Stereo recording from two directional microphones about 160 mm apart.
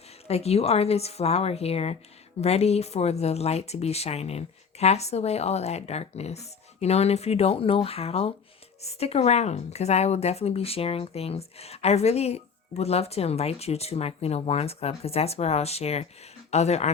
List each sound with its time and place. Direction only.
0.3 s speech: 40° left (ahead or behind)